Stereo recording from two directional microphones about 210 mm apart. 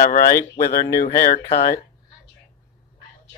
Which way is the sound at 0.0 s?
40° left (ahead or behind).